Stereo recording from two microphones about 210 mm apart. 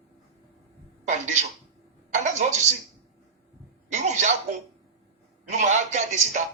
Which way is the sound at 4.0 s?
35° right (ahead or behind).